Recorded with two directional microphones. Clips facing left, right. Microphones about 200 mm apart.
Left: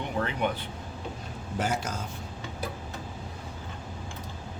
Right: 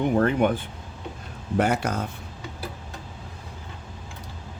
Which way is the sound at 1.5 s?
60° right (ahead or behind).